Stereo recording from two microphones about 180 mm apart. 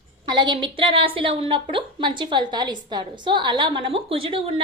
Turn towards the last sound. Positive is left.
turn(degrees=-30)  # may be behind; listen again after turning